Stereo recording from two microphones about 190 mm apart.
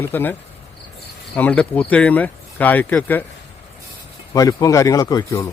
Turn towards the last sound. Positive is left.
turn(degrees=20)  # may be behind; listen again after turning